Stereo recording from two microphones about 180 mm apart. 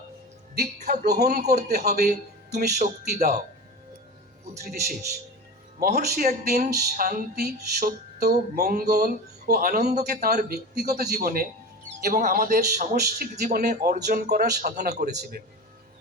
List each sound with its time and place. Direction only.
0.9 s music: 65° right (ahead or behind)
2.7 s speech: 40° right (ahead or behind)
4.6 s music: 60° right (ahead or behind)
5.8 s speech: 55° right (ahead or behind)
6.7 s music: 55° right (ahead or behind)